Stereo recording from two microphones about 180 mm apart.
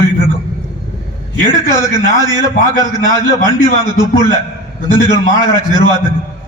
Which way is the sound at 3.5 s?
25° right (ahead or behind).